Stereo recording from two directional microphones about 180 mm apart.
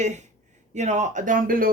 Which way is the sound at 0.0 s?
40° right (ahead or behind).